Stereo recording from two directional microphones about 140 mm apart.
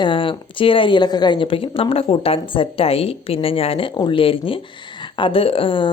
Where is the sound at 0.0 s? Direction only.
35° left (ahead or behind).